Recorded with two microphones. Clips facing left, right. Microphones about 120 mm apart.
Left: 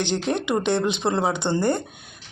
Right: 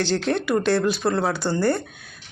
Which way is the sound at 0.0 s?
15° left (ahead or behind).